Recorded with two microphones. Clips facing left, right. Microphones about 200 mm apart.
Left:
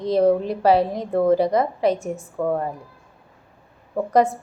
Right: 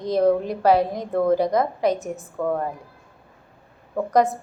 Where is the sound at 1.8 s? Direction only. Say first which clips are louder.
Left 1 dB; 30° left (ahead or behind).